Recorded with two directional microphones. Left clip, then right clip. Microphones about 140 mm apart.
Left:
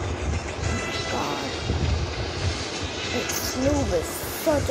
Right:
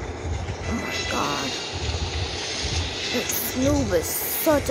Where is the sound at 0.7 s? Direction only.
20° left (ahead or behind).